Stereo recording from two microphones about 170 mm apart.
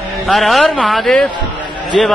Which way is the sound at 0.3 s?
Centre (ahead or behind).